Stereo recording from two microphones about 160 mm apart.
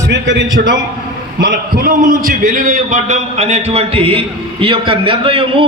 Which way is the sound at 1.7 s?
60° right (ahead or behind).